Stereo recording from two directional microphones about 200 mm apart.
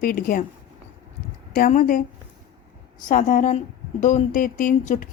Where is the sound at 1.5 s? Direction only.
45° left (ahead or behind).